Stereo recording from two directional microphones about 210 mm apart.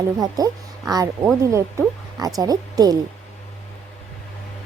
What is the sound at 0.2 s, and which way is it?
Speech, 15° right (ahead or behind).